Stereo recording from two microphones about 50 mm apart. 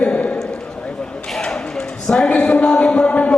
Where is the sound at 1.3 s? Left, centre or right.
Centre.